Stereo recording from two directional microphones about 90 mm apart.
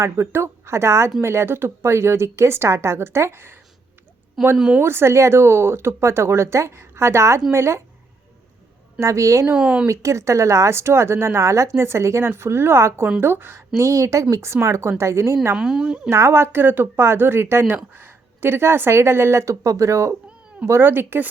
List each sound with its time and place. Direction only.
0.0 s speech: 30° right (ahead or behind)
4.5 s a woman's voice: 5° right (ahead or behind)
4.8 s speech: 25° right (ahead or behind)
9.0 s speech: 35° right (ahead or behind)
9.5 s a woman's voice: 10° right (ahead or behind)
9.8 s speech: 35° right (ahead or behind)
15.5 s a woman's voice: 5° right (ahead or behind)
16.0 s speech: 30° right (ahead or behind)